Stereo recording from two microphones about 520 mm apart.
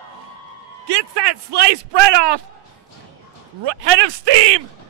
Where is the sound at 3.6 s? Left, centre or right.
Right.